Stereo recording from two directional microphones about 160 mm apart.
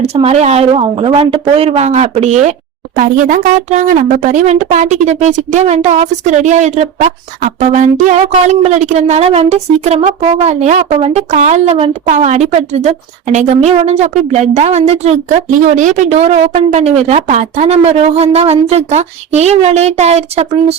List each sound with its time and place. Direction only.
0.0 s a woman's voice: 40° right (ahead or behind)